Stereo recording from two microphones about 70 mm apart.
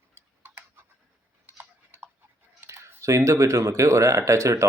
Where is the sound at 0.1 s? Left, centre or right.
Right.